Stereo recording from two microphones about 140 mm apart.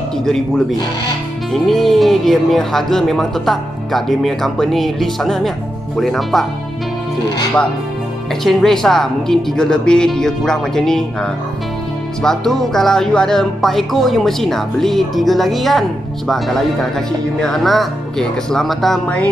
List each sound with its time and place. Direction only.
0.2 s speech: 5° left (ahead or behind)
8.3 s speech: 5° left (ahead or behind)